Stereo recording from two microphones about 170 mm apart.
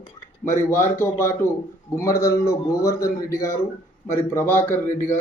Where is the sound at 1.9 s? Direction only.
15° left (ahead or behind).